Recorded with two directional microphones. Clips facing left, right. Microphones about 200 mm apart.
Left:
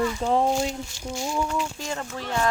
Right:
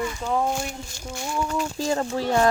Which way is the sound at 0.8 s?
50° right (ahead or behind).